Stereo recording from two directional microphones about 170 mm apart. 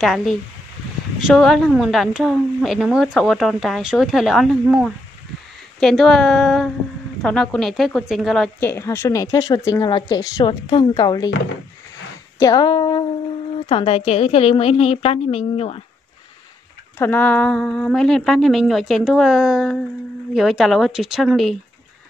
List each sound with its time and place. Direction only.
0.0 s a woman's voice: centre (ahead or behind)
8.5 s speech: 15° left (ahead or behind)
12.4 s a woman's voice: 20° left (ahead or behind)
17.0 s a woman's voice: 10° left (ahead or behind)